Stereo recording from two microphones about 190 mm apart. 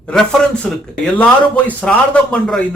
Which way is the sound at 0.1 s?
5° left (ahead or behind).